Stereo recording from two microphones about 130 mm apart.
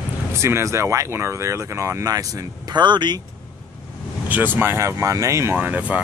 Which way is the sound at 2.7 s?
35° right (ahead or behind).